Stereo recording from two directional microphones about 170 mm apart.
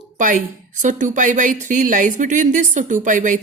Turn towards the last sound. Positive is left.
turn(degrees=-50)  # may be behind; listen again after turning